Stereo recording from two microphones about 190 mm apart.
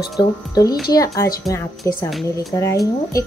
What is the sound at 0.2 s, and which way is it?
A woman's voice, 20° left (ahead or behind).